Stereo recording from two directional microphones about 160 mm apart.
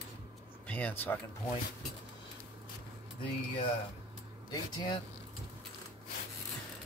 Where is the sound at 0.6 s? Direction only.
10° left (ahead or behind).